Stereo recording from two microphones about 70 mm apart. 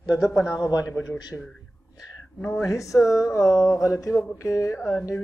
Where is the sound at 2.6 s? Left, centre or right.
Left.